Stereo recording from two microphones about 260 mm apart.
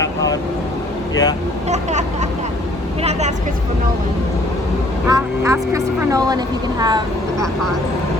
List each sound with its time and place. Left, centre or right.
1.1 s speech: centre
1.7 s speech: right
5.0 s speech: centre